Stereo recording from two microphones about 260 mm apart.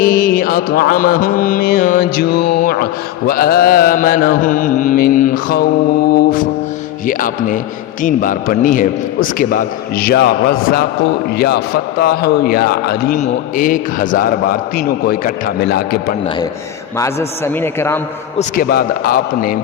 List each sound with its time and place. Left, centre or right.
0.0 s speech: left
17.0 s a man's voice: centre
18.3 s speech: left